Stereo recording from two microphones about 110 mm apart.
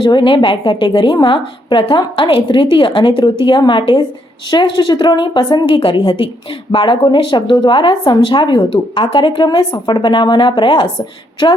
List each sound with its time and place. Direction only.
0.0 s a woman's voice: 45° left (ahead or behind)